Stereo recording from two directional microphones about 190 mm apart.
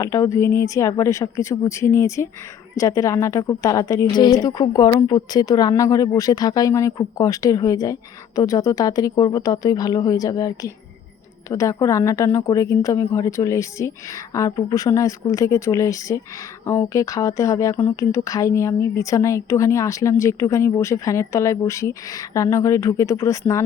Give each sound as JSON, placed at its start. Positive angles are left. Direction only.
{"t": 0.0, "sound": "a woman's voice", "side_deg": 15}